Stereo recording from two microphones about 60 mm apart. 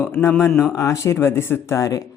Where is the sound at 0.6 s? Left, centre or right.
Left.